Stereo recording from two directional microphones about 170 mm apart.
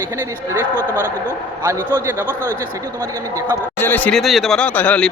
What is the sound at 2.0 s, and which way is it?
Speech, 15° right (ahead or behind).